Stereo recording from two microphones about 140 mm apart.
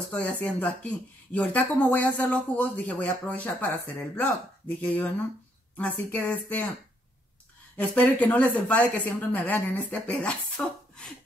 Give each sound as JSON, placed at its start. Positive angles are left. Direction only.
{"t": 0.1, "sound": "speech", "side_deg": 10}
{"t": 7.7, "sound": "speech", "side_deg": 10}